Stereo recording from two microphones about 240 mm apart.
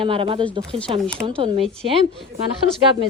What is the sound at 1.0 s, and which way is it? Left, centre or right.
Speech, centre.